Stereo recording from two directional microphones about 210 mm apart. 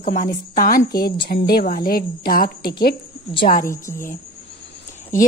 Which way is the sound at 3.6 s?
15° left (ahead or behind).